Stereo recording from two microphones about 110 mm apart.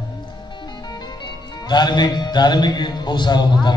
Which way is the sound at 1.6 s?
40° left (ahead or behind).